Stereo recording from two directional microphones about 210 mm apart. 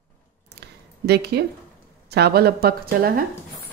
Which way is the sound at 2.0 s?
50° right (ahead or behind).